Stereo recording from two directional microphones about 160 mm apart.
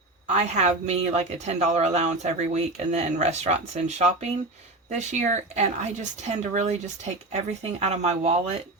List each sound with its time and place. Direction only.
0.3 s a woman's voice: 45° right (ahead or behind)